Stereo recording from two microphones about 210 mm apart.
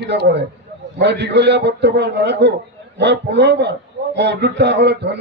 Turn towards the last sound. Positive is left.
turn(degrees=-55)  # may be behind; listen again after turning